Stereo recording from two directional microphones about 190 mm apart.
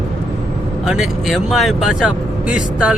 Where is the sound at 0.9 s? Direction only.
Centre (ahead or behind).